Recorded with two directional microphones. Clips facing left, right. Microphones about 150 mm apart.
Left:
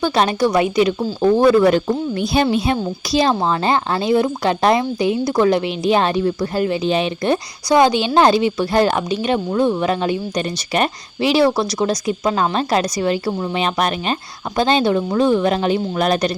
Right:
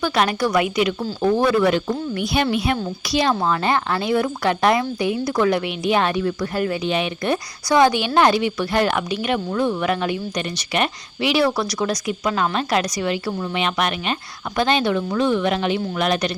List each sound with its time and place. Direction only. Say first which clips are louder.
0.0 s a woman's voice: left 3 dB; 30° left (ahead or behind)